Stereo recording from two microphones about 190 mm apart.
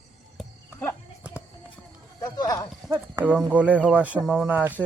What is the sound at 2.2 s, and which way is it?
Speech, 20° left (ahead or behind).